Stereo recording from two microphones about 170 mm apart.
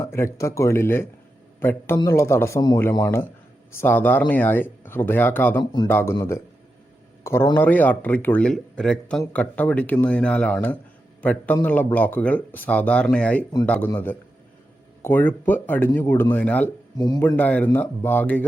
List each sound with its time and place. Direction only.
0.0 s a man's voice: 15° left (ahead or behind)